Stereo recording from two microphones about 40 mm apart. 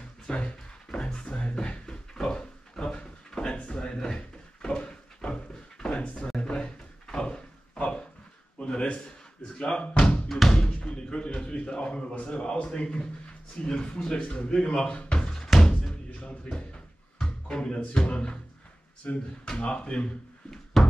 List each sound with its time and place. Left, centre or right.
0.3 s a sound: left
2.1 s drawer open or close: centre
5.9 s a sound: left
6.2 s drawer open or close: left
8.5 s a sound: left
9.6 s slam: left
10.2 s music: centre
10.7 s a sound: left
13.6 s speech: left
14.9 s speech: left
15.1 s music: centre
19.0 s speech: left
20.7 s music: centre